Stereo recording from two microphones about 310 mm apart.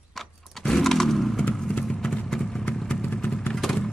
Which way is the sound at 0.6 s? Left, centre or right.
Centre.